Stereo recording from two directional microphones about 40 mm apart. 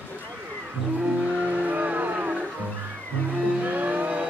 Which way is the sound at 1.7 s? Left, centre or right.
Right.